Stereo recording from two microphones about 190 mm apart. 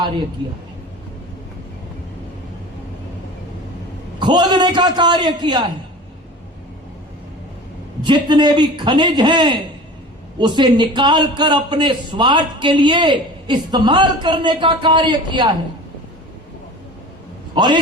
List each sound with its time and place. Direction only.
4.2 s a man's voice: 25° right (ahead or behind)
8.0 s a man's voice: 25° right (ahead or behind)
17.5 s a man's voice: 25° right (ahead or behind)